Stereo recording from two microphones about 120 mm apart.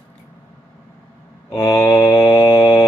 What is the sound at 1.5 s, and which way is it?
Speech, 30° left (ahead or behind).